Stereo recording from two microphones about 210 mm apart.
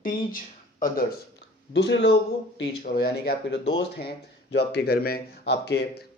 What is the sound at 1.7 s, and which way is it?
A man's voice, 60° left (ahead or behind).